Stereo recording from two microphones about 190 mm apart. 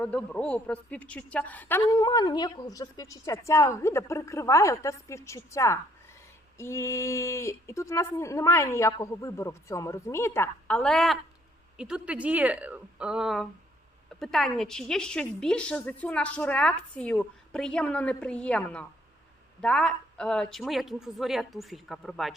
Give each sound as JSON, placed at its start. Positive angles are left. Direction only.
{"t": 0.0, "sound": "a woman's voice", "side_deg": 5}